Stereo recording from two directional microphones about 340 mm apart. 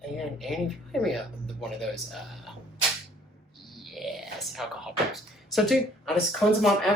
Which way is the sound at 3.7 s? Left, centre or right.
Centre.